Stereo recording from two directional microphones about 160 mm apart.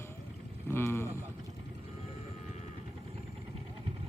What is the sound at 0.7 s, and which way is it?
Vehicle, 15° left (ahead or behind).